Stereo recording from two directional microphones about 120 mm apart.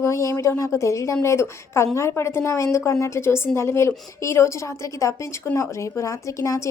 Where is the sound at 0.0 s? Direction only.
25° left (ahead or behind).